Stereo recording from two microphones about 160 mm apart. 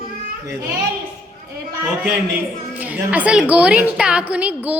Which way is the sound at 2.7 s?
10° right (ahead or behind).